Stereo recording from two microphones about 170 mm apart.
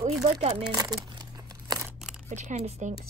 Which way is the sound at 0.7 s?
25° right (ahead or behind).